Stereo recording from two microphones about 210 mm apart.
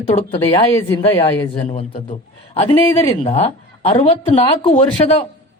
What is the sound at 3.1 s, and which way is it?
Speech, 30° left (ahead or behind).